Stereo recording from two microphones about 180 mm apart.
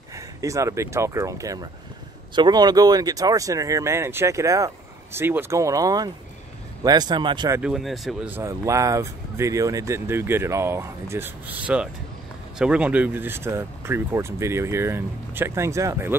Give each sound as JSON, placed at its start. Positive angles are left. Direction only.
{"t": 0.1, "sound": "speech", "side_deg": -20}
{"t": 7.6, "sound": "speech", "side_deg": 0}